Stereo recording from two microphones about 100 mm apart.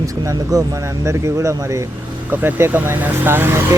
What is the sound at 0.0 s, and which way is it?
Speech, 30° right (ahead or behind).